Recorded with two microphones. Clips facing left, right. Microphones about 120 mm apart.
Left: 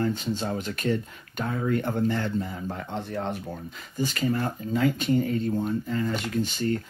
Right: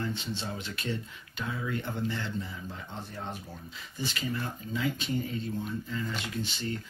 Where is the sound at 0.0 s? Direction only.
45° left (ahead or behind); by 3.3 s 65° left (ahead or behind).